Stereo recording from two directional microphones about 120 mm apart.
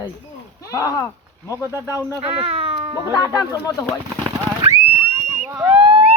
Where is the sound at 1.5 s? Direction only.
20° right (ahead or behind).